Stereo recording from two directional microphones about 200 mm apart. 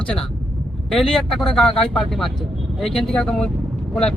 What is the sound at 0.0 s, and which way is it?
Speech, 5° left (ahead or behind).